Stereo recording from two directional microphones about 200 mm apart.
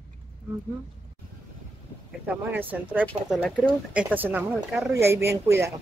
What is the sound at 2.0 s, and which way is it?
Speech, 10° right (ahead or behind).